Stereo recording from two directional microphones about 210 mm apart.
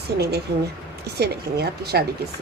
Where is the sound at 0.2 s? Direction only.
50° right (ahead or behind).